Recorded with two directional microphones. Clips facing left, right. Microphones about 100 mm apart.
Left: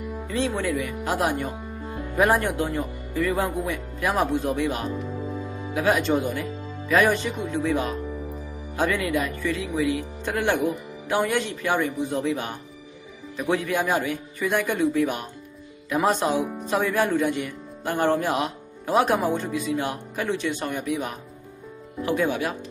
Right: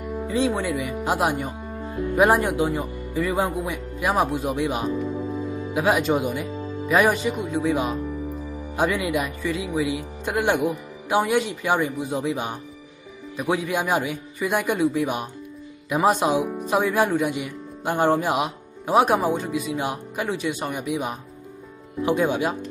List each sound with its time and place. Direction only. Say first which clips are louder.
0.3 s speech: right 2 dB; 15° right (ahead or behind)